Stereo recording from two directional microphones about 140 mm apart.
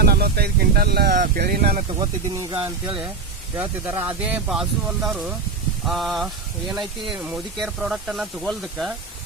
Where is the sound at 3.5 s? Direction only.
15° right (ahead or behind).